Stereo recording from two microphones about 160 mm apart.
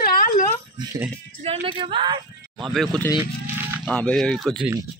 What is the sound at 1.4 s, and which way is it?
Speech, 35° right (ahead or behind).